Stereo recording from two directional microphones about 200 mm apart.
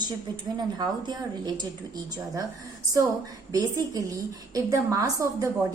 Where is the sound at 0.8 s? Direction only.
20° right (ahead or behind).